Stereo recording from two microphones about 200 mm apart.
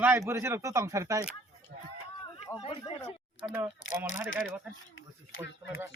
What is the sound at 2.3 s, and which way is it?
Speech, 25° left (ahead or behind).